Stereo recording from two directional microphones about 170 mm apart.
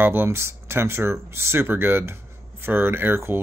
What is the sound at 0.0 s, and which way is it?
Speech, 15° right (ahead or behind).